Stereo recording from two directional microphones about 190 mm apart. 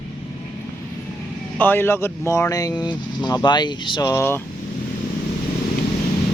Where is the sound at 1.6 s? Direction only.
10° left (ahead or behind).